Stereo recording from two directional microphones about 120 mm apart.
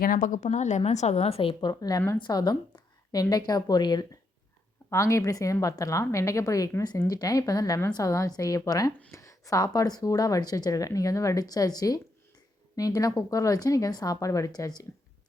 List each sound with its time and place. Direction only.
0.2 s a woman's voice: 85° left; by 1.7 s 50° left (ahead or behind)
1.8 s a woman's voice: 25° left (ahead or behind)